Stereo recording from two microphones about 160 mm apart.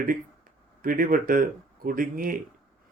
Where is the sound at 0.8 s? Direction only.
60° right (ahead or behind).